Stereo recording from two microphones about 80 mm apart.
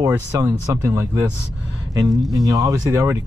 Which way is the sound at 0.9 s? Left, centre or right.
Right.